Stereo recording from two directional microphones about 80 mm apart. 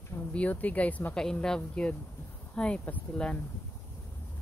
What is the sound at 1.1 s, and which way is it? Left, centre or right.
Speech, centre.